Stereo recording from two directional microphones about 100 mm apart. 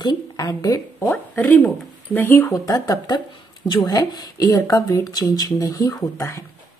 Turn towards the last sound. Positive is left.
turn(degrees=40)  # may be behind; listen again after turning